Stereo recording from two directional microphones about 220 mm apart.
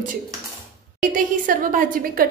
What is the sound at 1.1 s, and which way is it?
A woman's voice, 40° right (ahead or behind).